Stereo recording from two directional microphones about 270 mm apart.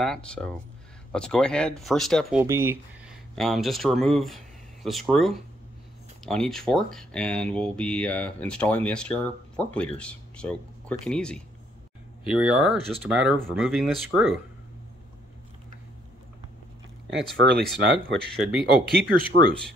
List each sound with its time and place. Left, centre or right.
0.0 s speech: centre
2.4 s speech: centre
17.1 s speech: right
18.3 s speech: centre
18.9 s speech: right